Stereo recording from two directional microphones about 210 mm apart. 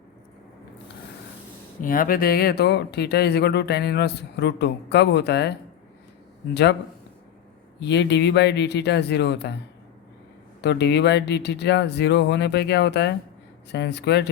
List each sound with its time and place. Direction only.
1.8 s speech: 40° left (ahead or behind)
7.8 s speech: 55° left (ahead or behind)
10.6 s speech: 55° left (ahead or behind)